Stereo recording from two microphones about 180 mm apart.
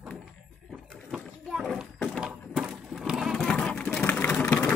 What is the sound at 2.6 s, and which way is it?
Sewing machine, 5° right (ahead or behind).